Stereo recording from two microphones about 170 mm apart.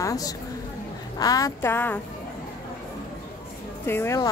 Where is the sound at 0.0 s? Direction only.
20° left (ahead or behind).